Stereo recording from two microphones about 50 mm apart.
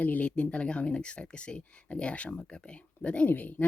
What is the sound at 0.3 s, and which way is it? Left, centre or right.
Speech, left.